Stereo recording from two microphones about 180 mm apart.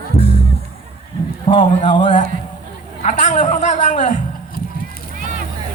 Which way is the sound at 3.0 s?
45° left (ahead or behind).